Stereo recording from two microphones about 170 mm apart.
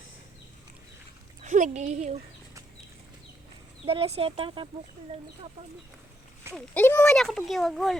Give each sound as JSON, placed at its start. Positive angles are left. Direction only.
{"t": 1.4, "sound": "speech", "side_deg": -50}
{"t": 3.8, "sound": "speech", "side_deg": -35}
{"t": 6.5, "sound": "speech", "side_deg": 10}